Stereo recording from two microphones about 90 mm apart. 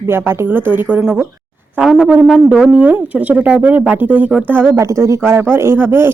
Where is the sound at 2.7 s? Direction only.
20° right (ahead or behind).